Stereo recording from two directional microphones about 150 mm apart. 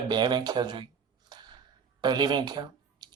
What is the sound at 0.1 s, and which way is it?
Speech, 30° right (ahead or behind).